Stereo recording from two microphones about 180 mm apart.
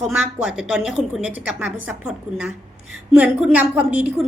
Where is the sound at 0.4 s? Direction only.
5° right (ahead or behind).